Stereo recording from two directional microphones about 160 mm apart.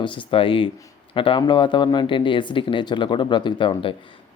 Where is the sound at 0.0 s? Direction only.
35° left (ahead or behind).